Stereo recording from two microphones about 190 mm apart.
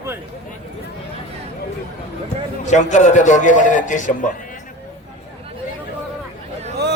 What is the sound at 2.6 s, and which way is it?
A man's voice, 40° left (ahead or behind).